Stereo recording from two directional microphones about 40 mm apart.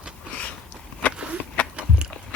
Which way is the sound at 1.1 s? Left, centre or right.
Right.